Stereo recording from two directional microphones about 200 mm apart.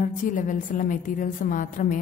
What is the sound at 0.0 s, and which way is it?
A woman's voice, 40° left (ahead or behind).